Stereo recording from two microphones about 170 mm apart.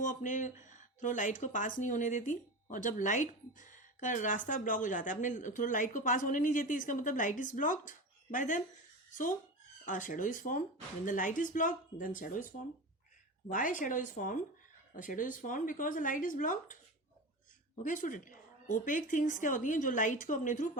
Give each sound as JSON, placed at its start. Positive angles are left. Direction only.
{"t": 0.0, "sound": "speech", "side_deg": 50}
{"t": 9.8, "sound": "speech", "side_deg": 50}
{"t": 17.8, "sound": "speech", "side_deg": 50}